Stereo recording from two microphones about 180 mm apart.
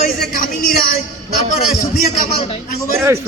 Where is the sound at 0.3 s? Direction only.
50° left (ahead or behind).